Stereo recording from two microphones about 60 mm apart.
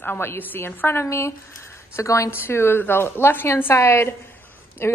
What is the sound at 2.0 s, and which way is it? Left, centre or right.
Speech, left.